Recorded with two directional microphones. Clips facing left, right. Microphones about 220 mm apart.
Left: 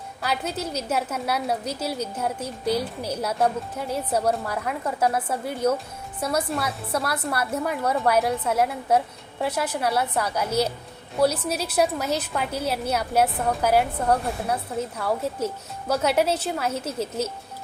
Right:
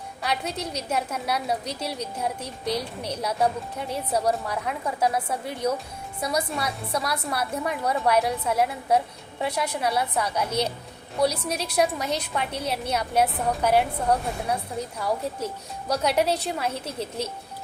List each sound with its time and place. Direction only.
0.2 s a woman's voice: centre (ahead or behind)